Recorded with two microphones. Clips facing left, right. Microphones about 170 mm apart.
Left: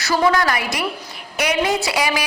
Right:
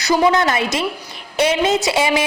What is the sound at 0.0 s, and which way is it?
A woman's voice, 20° right (ahead or behind).